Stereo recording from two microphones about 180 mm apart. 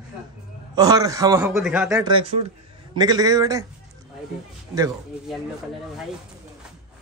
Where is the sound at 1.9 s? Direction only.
25° right (ahead or behind).